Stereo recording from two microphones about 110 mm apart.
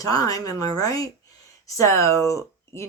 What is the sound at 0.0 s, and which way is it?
Speech, 35° left (ahead or behind).